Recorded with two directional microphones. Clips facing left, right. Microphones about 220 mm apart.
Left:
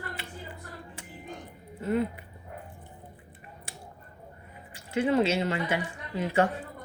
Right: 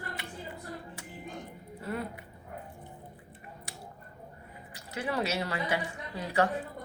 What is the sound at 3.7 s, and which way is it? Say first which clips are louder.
Finger snapping: left 2 dB; 30° left (ahead or behind).